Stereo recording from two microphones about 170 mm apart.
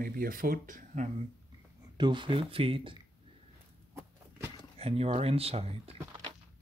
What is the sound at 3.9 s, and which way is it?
Walk, 15° right (ahead or behind).